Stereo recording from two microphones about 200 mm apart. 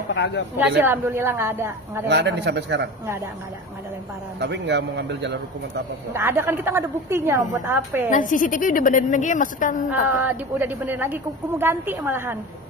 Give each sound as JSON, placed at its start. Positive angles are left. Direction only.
{"t": 0.1, "sound": "a woman's voice", "side_deg": 60}
{"t": 0.6, "sound": "a woman's voice", "side_deg": -10}
{"t": 2.0, "sound": "a man's voice", "side_deg": -60}
{"t": 4.4, "sound": "a man's voice", "side_deg": -60}
{"t": 6.1, "sound": "a woman's voice", "side_deg": -10}
{"t": 8.1, "sound": "a woman's voice", "side_deg": 40}
{"t": 9.8, "sound": "a woman's voice", "side_deg": -10}